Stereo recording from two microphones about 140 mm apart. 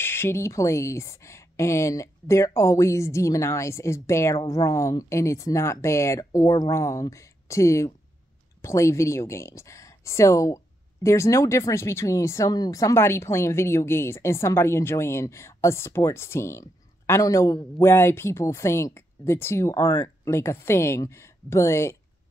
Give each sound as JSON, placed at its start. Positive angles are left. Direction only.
{"t": 0.0, "sound": "speech", "side_deg": 15}